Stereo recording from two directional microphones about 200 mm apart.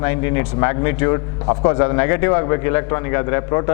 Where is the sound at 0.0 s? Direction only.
15° left (ahead or behind).